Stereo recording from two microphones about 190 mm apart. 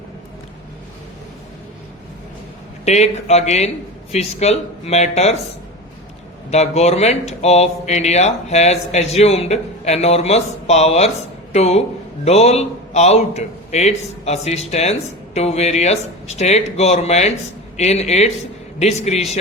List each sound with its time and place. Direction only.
2.8 s speech: 35° left (ahead or behind)
6.5 s a man's voice: 35° left (ahead or behind)